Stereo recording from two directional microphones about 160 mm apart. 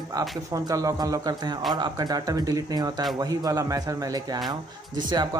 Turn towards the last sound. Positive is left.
turn(degrees=-25)  # may be behind; listen again after turning